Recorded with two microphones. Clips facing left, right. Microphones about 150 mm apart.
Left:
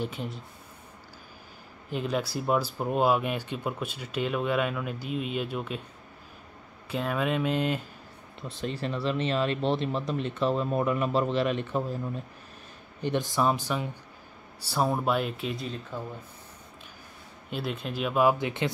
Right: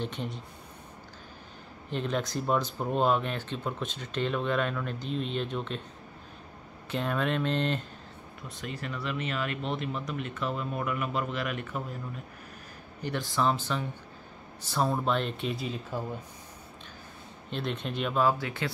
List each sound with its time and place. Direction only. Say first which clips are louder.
0.0 s speech: left 1 dB; 5° left (ahead or behind)
1.9 s speech: left 1 dB; 5° left (ahead or behind)
6.9 s speech: left 1 dB; 5° left (ahead or behind)
8.4 s speech: left 6 dB; 30° left (ahead or behind)
13.0 s speech: left 3 dB; 20° left (ahead or behind); by 16.0 s 5° right (ahead or behind)
17.5 s speech: left 1 dB; 5° left (ahead or behind); by 18.7 s 20° left (ahead or behind)